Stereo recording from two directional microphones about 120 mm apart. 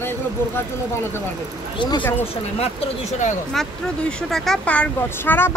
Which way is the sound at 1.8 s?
40° left (ahead or behind).